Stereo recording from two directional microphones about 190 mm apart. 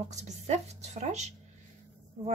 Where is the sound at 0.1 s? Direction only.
35° right (ahead or behind).